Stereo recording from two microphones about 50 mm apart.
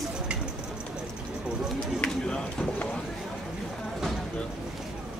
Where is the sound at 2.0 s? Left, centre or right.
Centre.